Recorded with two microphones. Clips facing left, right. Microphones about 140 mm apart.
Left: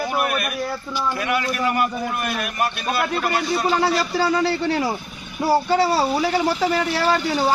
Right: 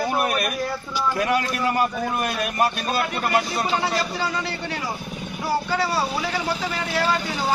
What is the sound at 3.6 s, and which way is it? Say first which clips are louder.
Speech: left 4 dB; 35° left (ahead or behind).